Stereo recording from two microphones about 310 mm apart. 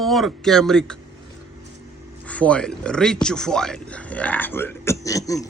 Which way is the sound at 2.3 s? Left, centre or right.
Centre.